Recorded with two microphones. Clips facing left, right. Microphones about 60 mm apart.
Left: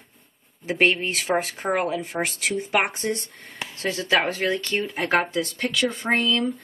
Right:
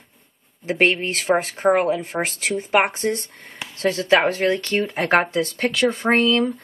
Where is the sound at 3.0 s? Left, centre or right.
Centre.